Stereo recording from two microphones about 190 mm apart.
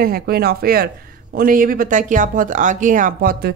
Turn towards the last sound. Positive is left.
turn(degrees=-50)  # may be behind; listen again after turning